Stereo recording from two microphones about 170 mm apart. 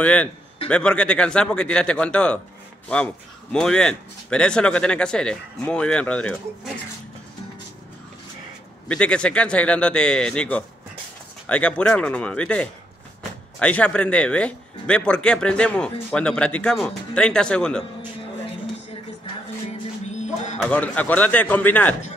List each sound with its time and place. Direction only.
0.0 s a man's voice: 5° left (ahead or behind)
3.5 s speech: 5° left (ahead or behind)
8.8 s a man's voice: 5° left (ahead or behind)
20.1 s music: 45° left (ahead or behind)
20.5 s a man's voice: 10° left (ahead or behind)